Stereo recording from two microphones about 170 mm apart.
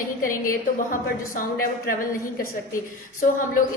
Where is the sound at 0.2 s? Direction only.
55° left (ahead or behind).